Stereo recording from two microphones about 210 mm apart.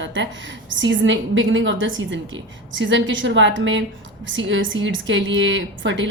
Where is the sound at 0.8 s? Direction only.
60° right (ahead or behind).